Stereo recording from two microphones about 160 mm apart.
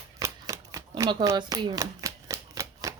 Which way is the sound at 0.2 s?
20° right (ahead or behind).